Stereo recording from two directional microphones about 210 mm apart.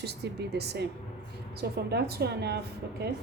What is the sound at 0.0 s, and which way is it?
Speech, 50° right (ahead or behind).